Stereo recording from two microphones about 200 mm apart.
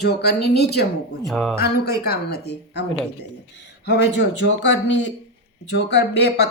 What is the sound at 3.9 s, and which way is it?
Speech, 60° left (ahead or behind).